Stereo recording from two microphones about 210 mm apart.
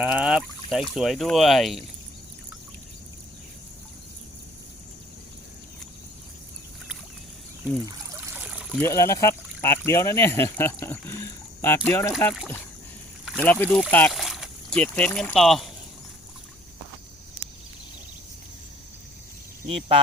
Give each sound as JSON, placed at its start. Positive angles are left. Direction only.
{"t": 0.0, "sound": "speech", "side_deg": -5}
{"t": 7.9, "sound": "trickle", "side_deg": -10}
{"t": 8.8, "sound": "speech", "side_deg": 15}
{"t": 13.2, "sound": "speech", "side_deg": 5}
{"t": 19.6, "sound": "speech", "side_deg": -30}